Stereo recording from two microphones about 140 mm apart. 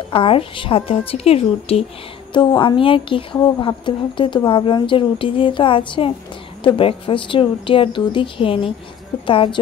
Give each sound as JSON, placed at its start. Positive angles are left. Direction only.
{"t": 0.1, "sound": "a woman's voice", "side_deg": 40}